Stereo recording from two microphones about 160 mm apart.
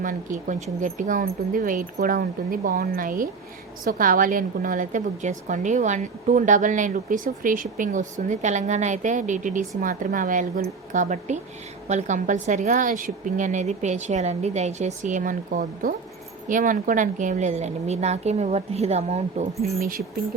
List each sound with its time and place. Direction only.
0.0 s a woman's voice: 55° right (ahead or behind)